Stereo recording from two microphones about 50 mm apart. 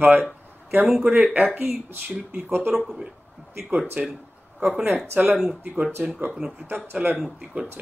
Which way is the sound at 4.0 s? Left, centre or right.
Right.